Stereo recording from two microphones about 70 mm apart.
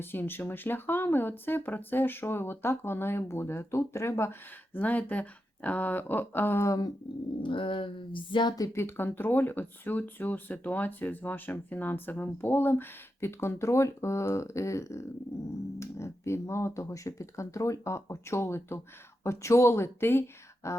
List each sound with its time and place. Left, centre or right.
0.0 s speech: left
6.7 s speech: left
8.4 s a woman's voice: left
8.7 s speech: left
20.6 s speech: left